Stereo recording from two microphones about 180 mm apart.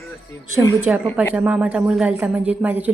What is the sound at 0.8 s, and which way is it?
A woman's voice, 5° right (ahead or behind).